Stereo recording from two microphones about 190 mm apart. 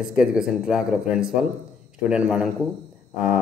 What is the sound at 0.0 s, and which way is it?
A man's voice, 5° right (ahead or behind).